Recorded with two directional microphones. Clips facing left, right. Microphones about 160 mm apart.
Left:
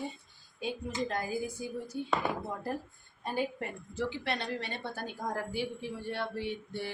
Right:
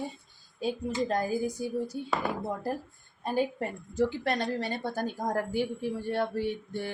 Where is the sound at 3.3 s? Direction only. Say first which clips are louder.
Right 5 dB; 45° right (ahead or behind).